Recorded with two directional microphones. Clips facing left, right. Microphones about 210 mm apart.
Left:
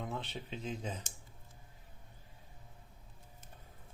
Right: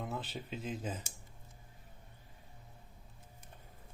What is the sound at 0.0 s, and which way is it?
Speech, 5° right (ahead or behind).